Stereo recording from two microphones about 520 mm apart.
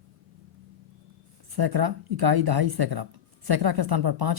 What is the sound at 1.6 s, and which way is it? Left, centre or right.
Speech, right.